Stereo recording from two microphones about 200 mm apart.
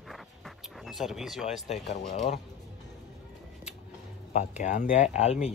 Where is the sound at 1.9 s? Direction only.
40° left (ahead or behind).